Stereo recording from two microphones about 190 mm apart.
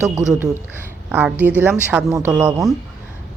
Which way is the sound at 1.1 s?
10° right (ahead or behind).